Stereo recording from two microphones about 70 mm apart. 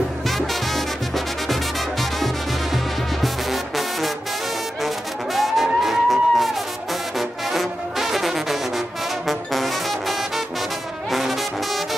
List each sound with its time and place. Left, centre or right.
0.3 s music: centre
11.1 s brass instrument: centre